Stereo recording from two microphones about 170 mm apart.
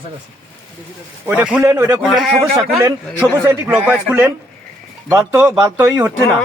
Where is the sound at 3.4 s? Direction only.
10° right (ahead or behind).